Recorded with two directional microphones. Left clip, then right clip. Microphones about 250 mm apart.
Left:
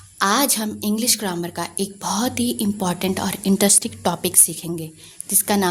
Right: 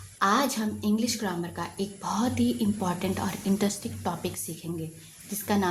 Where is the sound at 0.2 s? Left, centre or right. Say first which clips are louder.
Left 6 dB; left.